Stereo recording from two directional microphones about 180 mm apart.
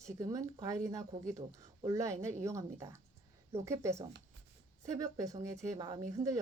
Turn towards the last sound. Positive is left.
turn(degrees=-20)  # may be behind; listen again after turning